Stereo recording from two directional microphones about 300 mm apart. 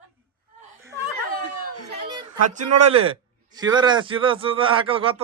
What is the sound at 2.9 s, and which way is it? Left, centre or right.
A man's voice, centre.